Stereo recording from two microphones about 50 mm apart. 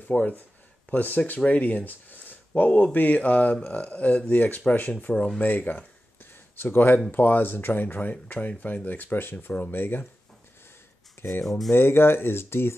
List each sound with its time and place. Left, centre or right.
0.1 s speech: left
9.5 s speech: left
9.8 s speech: left
11.4 s speech: centre
11.7 s speech: left